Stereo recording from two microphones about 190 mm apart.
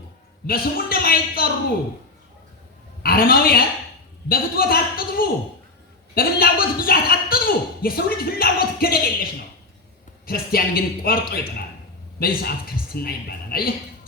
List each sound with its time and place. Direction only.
0.4 s speech: 50° left (ahead or behind)
3.0 s a man's voice: 50° left (ahead or behind)